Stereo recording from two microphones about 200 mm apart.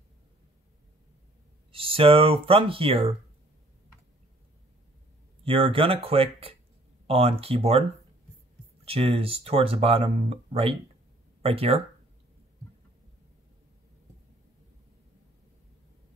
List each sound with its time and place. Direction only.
1.7 s speech: 25° right (ahead or behind)
5.4 s speech: 25° right (ahead or behind)
8.8 s speech: 30° right (ahead or behind)